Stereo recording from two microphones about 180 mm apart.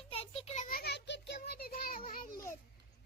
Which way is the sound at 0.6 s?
60° left (ahead or behind).